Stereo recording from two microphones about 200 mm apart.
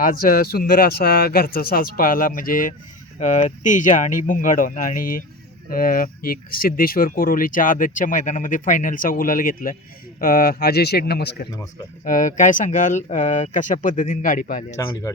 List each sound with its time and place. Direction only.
0.0 s speech: 45° left (ahead or behind)
12.0 s speech: 40° left (ahead or behind)